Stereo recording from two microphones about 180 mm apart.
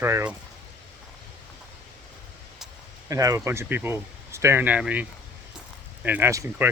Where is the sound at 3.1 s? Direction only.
20° right (ahead or behind).